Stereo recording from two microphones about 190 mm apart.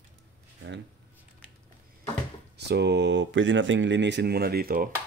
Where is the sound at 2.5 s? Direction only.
60° right (ahead or behind).